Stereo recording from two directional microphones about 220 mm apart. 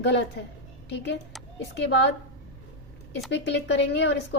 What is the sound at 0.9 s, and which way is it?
Speech, 50° left (ahead or behind).